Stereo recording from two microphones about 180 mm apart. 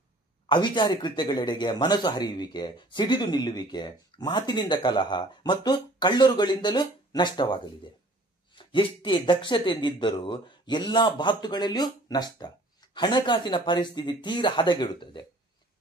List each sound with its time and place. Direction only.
0.5 s speech: 25° left (ahead or behind)